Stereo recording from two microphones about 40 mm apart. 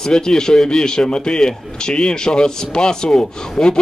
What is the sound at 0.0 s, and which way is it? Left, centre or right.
A man's voice, centre.